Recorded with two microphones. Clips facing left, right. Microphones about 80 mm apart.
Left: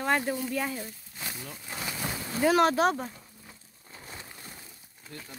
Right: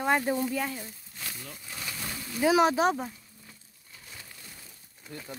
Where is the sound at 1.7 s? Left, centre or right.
Left.